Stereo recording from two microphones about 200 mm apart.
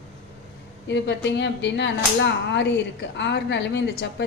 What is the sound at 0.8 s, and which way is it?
Speech, 60° left (ahead or behind).